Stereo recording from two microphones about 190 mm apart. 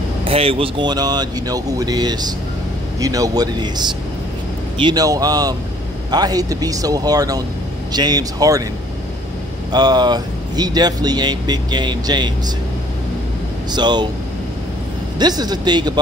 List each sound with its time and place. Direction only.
0.2 s speech: 30° right (ahead or behind)
9.7 s speech: 20° right (ahead or behind)
13.7 s speech: 25° right (ahead or behind)
15.1 s speech: 20° right (ahead or behind)